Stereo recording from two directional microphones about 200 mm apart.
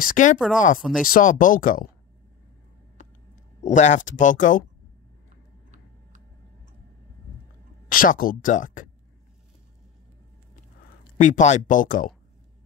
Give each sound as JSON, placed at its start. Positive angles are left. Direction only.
{"t": 0.0, "sound": "speech", "side_deg": 40}
{"t": 0.7, "sound": "speech", "side_deg": 0}
{"t": 1.0, "sound": "speech", "side_deg": 45}
{"t": 3.6, "sound": "speech", "side_deg": 35}
{"t": 7.9, "sound": "speech", "side_deg": 45}
{"t": 11.1, "sound": "speech", "side_deg": 40}